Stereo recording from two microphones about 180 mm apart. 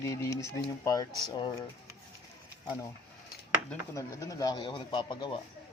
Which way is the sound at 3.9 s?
15° left (ahead or behind).